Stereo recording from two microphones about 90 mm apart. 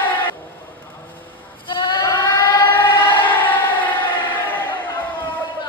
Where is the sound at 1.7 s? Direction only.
60° left (ahead or behind).